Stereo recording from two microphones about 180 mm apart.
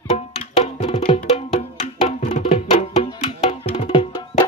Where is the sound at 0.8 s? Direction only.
30° left (ahead or behind).